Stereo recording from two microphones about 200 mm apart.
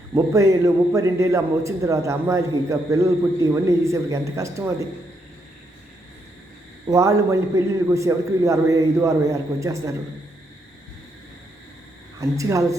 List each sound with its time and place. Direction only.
0.1 s a man's voice: 15° right (ahead or behind)
6.8 s a man's voice: 15° right (ahead or behind)
12.2 s a man's voice: 15° right (ahead or behind)